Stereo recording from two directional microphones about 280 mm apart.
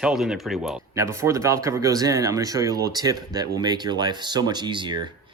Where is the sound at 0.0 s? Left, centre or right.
Centre.